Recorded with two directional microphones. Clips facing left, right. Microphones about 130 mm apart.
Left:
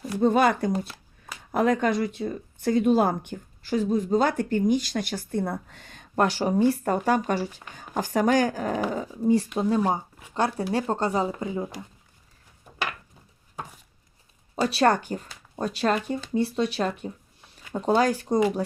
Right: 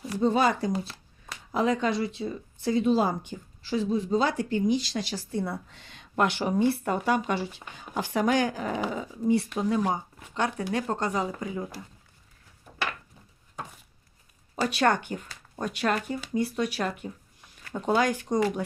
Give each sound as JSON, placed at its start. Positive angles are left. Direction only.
{"t": 0.0, "sound": "speech", "side_deg": 50}
{"t": 1.5, "sound": "speech", "side_deg": 50}
{"t": 14.5, "sound": "speech", "side_deg": 30}